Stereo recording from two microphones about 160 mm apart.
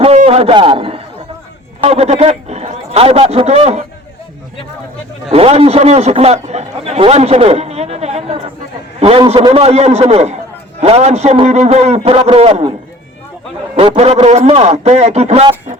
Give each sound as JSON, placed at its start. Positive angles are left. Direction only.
{"t": 0.3, "sound": "a man's voice", "side_deg": -40}
{"t": 5.3, "sound": "a man's voice", "side_deg": -40}
{"t": 13.7, "sound": "a man's voice", "side_deg": -40}